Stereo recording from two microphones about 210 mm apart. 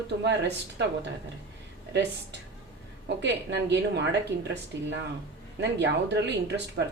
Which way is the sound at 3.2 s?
55° right (ahead or behind).